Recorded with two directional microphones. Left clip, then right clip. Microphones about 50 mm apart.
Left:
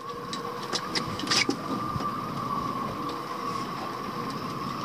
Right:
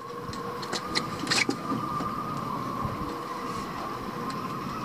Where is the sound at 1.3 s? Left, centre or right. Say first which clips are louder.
Left 1 dB; centre.